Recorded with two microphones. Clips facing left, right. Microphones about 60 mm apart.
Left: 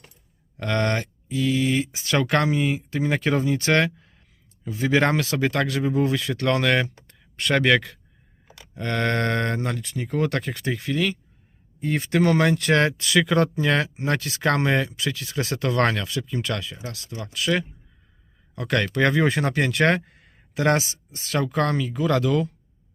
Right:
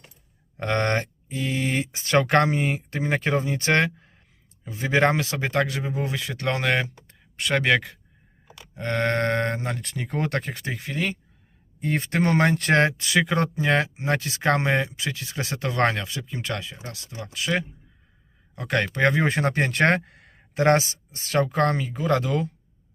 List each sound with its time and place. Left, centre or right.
0.5 s speech: right
3.0 s speech: right
9.8 s speech: right
10.3 s speech: right
20.1 s a sound: right
20.5 s speech: right